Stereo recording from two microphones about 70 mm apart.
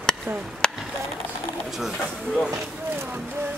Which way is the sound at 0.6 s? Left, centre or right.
Centre.